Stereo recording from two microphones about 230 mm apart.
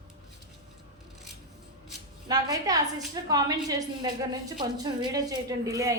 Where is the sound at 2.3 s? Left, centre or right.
Centre.